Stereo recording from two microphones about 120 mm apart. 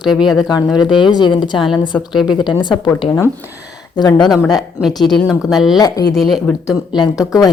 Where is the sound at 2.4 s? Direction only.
40° left (ahead or behind).